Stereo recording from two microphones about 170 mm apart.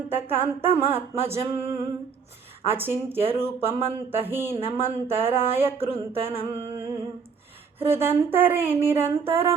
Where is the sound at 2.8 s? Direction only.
10° right (ahead or behind).